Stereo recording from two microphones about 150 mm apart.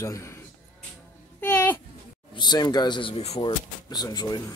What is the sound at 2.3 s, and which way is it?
Speech, 30° left (ahead or behind).